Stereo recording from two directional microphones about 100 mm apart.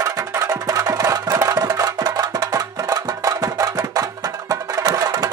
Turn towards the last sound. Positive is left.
turn(degrees=-40)  # may be behind; listen again after turning